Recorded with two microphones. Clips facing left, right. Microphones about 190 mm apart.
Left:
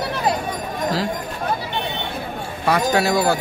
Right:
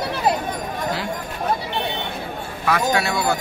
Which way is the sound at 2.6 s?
35° left (ahead or behind).